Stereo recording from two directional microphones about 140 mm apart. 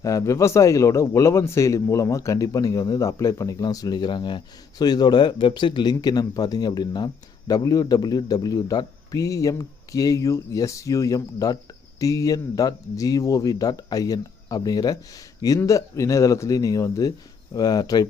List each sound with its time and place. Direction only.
0.0 s a man's voice: 25° left (ahead or behind)